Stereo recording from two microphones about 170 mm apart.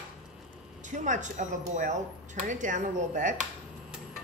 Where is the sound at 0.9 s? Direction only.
45° right (ahead or behind).